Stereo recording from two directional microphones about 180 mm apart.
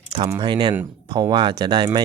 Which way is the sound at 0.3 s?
25° right (ahead or behind).